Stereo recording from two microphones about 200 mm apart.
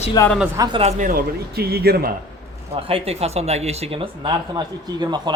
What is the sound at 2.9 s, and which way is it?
Speech, 30° right (ahead or behind).